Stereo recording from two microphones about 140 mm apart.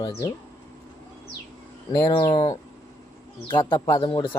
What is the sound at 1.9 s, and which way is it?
Speech, 30° left (ahead or behind).